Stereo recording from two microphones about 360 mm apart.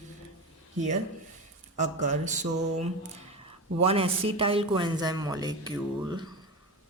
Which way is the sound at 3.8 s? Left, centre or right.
Centre.